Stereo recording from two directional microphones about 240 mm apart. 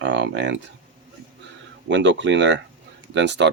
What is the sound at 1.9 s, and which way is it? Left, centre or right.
Speech, right.